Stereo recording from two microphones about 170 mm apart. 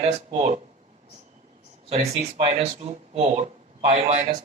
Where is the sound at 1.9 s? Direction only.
40° right (ahead or behind).